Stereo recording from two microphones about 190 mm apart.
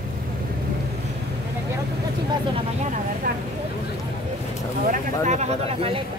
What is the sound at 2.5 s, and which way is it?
Vehicle, 35° right (ahead or behind).